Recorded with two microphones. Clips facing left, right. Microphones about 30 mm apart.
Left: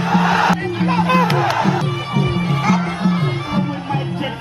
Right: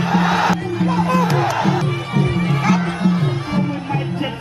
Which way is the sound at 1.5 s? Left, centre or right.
Centre.